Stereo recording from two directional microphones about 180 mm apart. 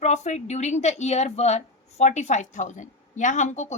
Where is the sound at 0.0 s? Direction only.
40° left (ahead or behind).